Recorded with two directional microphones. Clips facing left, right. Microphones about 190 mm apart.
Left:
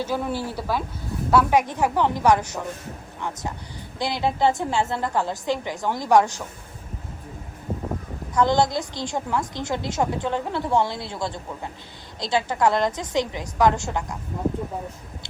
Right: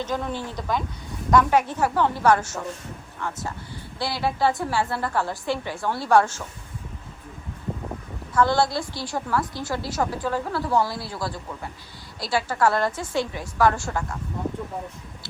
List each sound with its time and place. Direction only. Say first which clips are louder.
0.0 s speech: left 2 dB; 10° left (ahead or behind)
8.4 s a woman's voice: left 1 dB; 20° left (ahead or behind)